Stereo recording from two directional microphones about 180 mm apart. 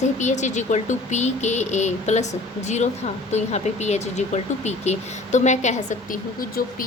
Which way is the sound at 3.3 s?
40° left (ahead or behind).